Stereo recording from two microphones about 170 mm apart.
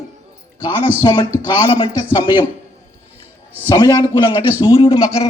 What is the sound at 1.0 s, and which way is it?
A man's voice, 25° left (ahead or behind).